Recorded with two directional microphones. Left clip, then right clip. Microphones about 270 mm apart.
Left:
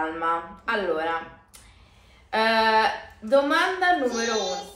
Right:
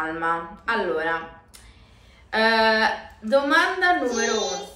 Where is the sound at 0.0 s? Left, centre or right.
Centre.